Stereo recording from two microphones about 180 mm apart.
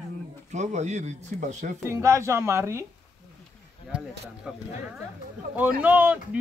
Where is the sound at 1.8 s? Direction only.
15° right (ahead or behind).